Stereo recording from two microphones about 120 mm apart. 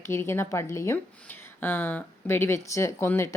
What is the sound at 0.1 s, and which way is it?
A woman's voice, 20° left (ahead or behind).